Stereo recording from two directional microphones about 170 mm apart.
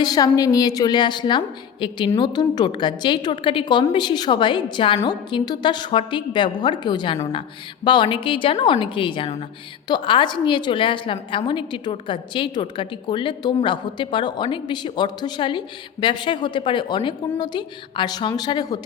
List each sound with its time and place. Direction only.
0.0 s a woman's voice: 20° left (ahead or behind)